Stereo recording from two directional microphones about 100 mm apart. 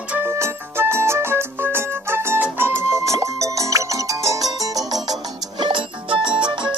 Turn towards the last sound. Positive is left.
turn(degrees=-50)  # may be behind; listen again after turning